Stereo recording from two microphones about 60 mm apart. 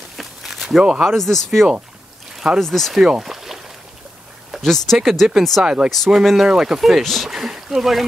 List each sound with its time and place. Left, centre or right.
0.2 s a sound: centre
1.1 s speech: centre
3.1 s boat: centre
4.6 s speech: centre
5.6 s speech: centre
5.9 s speech: centre